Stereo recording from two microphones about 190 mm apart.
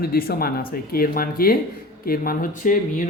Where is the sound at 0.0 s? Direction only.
50° left (ahead or behind).